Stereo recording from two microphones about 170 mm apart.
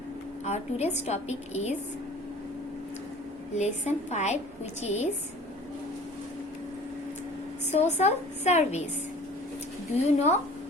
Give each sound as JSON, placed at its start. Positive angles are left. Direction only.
{"t": 0.4, "sound": "a woman's voice", "side_deg": 40}
{"t": 3.5, "sound": "a woman's voice", "side_deg": 40}
{"t": 7.7, "sound": "a woman's voice", "side_deg": 40}
{"t": 10.2, "sound": "a woman's voice", "side_deg": 40}